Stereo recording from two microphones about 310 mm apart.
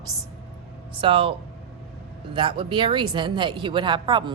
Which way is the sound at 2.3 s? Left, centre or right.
Centre.